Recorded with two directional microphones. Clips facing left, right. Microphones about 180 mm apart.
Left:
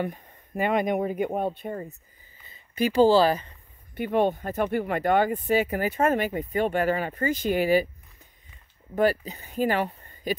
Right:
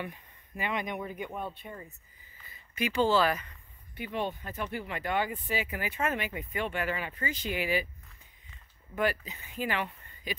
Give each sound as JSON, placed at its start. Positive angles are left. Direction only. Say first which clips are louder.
{"t": 0.0, "sound": "speech", "louder": "left 9 dB", "side_deg": 45}
{"t": 2.4, "sound": "speech", "louder": "left 8 dB", "side_deg": 30}
{"t": 3.9, "sound": "speech", "louder": "left 11 dB", "side_deg": 50}
{"t": 8.9, "sound": "speech", "louder": "left 7 dB", "side_deg": 35}